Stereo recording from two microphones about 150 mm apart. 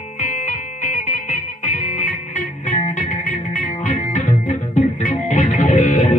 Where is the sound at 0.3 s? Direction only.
60° left (ahead or behind).